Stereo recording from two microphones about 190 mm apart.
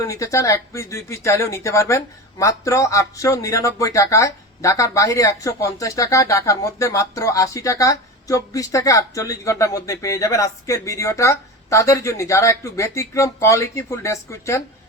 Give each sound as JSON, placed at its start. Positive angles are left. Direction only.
{"t": 0.0, "sound": "speech", "side_deg": 15}